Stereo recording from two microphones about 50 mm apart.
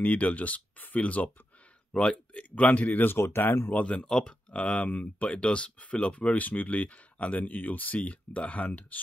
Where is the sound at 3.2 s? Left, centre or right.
Left.